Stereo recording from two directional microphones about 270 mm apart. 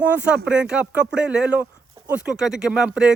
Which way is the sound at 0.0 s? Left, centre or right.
Centre.